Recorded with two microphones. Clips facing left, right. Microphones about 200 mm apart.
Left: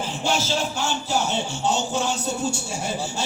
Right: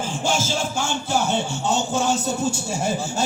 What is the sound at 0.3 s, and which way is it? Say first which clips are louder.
Music: even; 50° right (ahead or behind).